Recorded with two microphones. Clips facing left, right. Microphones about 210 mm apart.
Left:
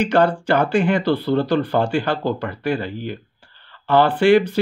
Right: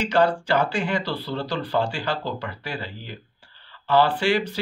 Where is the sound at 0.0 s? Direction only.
55° left (ahead or behind).